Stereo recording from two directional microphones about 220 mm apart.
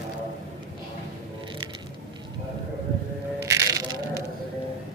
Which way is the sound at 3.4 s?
15° right (ahead or behind).